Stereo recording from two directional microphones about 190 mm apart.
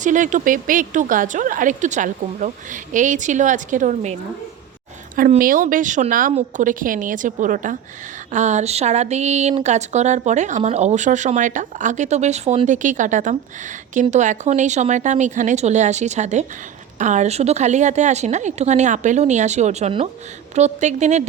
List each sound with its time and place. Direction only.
0.0 s speech: 40° right (ahead or behind)
5.4 s speech: 45° right (ahead or behind)